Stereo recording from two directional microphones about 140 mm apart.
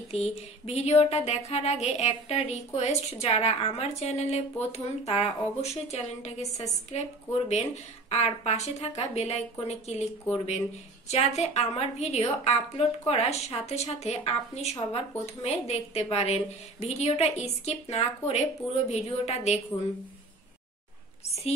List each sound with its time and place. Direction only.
0.7 s a woman's voice: 50° left (ahead or behind)